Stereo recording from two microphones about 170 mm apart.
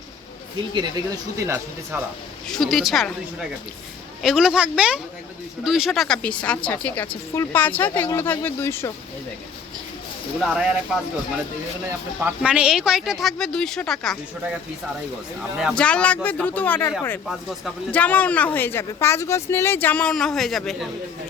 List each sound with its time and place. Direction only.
0.7 s speech: 25° right (ahead or behind)
2.5 s speech: centre (ahead or behind)
4.2 s speech: 5° right (ahead or behind); by 8.9 s 15° left (ahead or behind)
10.4 s speech: 5° right (ahead or behind)
15.7 s speech: 5° left (ahead or behind)
17.2 s speech: centre (ahead or behind)